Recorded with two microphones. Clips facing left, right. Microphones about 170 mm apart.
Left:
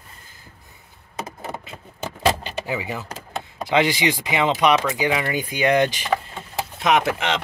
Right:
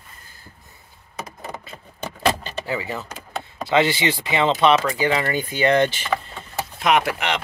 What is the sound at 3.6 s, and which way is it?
Speech, 15° left (ahead or behind).